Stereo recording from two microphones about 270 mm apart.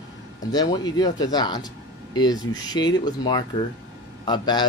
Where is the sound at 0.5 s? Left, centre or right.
Centre.